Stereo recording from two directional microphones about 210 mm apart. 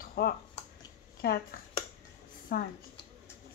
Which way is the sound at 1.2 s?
50° left (ahead or behind).